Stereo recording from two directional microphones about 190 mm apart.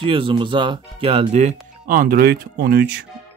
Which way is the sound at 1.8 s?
50° right (ahead or behind).